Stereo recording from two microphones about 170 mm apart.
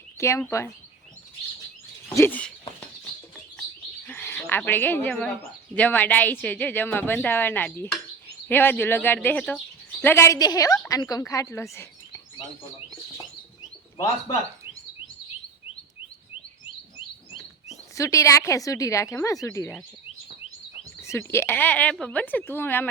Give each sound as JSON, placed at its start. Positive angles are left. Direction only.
{"t": 0.2, "sound": "a woman's voice", "side_deg": 15}
{"t": 2.0, "sound": "a sound", "side_deg": 10}
{"t": 3.6, "sound": "bird", "side_deg": 10}
{"t": 5.7, "sound": "a woman's voice", "side_deg": 10}
{"t": 11.7, "sound": "bird vocalization", "side_deg": 15}
{"t": 17.9, "sound": "a woman's voice", "side_deg": 20}
{"t": 21.0, "sound": "a woman's voice", "side_deg": 15}